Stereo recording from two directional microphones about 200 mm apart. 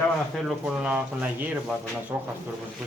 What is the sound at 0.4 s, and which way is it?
Speech, 5° right (ahead or behind).